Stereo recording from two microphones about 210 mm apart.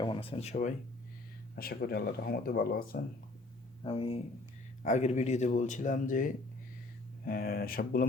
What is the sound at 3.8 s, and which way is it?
Speech, 25° left (ahead or behind).